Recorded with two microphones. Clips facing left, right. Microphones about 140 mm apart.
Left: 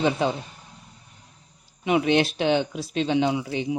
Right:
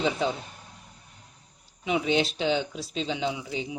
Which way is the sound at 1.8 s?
60° left (ahead or behind).